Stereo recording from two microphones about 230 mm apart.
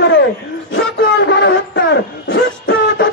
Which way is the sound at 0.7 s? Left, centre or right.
Left.